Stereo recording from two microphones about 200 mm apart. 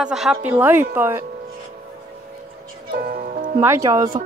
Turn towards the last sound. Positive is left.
turn(degrees=-20)  # may be behind; listen again after turning